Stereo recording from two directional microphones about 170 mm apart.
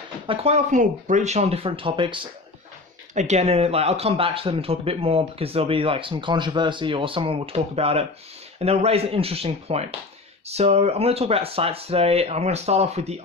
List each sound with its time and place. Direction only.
0.3 s speech: 40° right (ahead or behind)
3.2 s speech: 40° right (ahead or behind)